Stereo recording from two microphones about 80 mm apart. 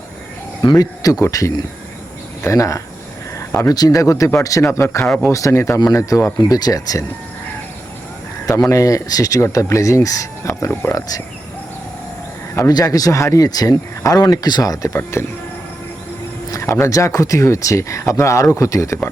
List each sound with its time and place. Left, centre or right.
0.6 s a man's voice: left
8.4 s speech: left
10.4 s a sound: left
12.6 s speech: left
14.9 s speech: left
16.5 s a sound: left
16.8 s speech: left